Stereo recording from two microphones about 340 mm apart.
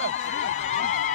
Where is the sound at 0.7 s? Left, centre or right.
Left.